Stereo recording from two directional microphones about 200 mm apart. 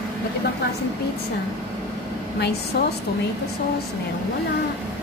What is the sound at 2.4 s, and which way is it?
Speech, 55° left (ahead or behind).